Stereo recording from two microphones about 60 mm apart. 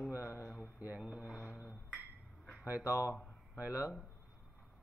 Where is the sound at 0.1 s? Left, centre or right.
Right.